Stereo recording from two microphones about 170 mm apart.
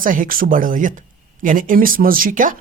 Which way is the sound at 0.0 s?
50° right (ahead or behind).